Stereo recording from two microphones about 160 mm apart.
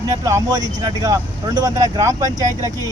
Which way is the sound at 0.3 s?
20° right (ahead or behind).